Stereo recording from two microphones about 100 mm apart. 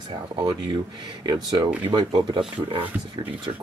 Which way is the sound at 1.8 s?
45° right (ahead or behind).